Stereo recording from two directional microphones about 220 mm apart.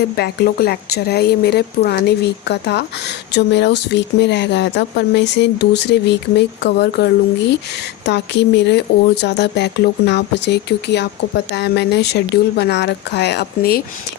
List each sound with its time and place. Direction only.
0.2 s speech: 45° left (ahead or behind)